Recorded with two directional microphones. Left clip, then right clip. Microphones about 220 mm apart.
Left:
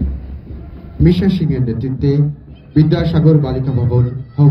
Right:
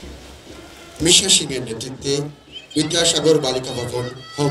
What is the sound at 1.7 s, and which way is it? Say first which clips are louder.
A man's voice: left 4 dB; 45° right (ahead or behind).